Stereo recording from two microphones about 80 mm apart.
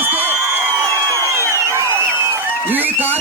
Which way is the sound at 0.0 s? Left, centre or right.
Right.